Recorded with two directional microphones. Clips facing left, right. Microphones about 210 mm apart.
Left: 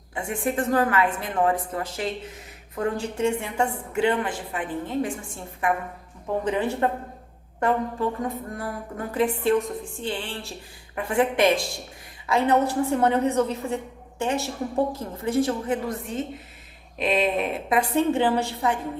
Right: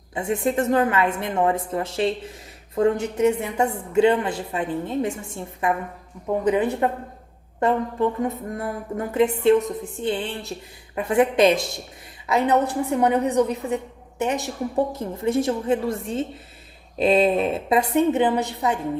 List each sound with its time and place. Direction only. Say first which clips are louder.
0.1 s a woman's voice: right 4 dB; 25° right (ahead or behind)
6.5 s a woman's voice: right 3 dB; 15° right (ahead or behind)